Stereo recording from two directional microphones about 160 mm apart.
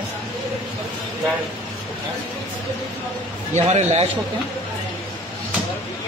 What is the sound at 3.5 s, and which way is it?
Speech, 45° right (ahead or behind).